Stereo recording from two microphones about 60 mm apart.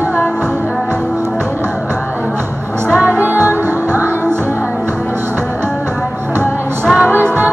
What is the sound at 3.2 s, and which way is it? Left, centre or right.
Music, right.